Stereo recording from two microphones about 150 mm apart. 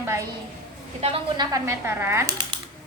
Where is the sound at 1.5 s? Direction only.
15° right (ahead or behind).